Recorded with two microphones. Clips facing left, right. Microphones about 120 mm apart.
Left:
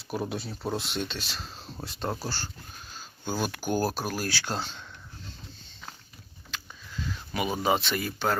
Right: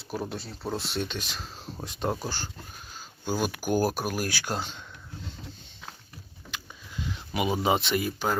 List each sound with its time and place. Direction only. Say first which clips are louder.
0.0 s speech: left 2 dB; centre (ahead or behind)
1.0 s speech: right 1 dB; 15° right (ahead or behind)
7.0 s speech: right 2 dB; 20° right (ahead or behind)